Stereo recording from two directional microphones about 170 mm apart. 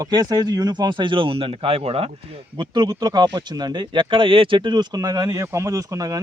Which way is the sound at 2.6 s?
25° right (ahead or behind).